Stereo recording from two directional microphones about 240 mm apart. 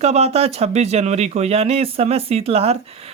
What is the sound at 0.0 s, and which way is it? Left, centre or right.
Speech, right.